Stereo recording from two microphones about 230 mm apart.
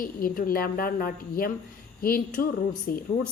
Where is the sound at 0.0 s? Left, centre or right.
Left.